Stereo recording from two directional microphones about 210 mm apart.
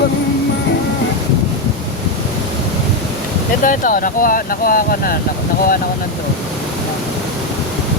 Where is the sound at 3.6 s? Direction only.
40° left (ahead or behind).